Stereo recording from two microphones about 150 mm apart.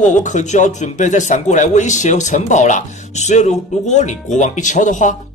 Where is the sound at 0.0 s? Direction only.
55° left (ahead or behind).